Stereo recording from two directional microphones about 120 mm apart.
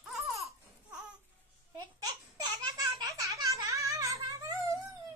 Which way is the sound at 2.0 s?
30° right (ahead or behind).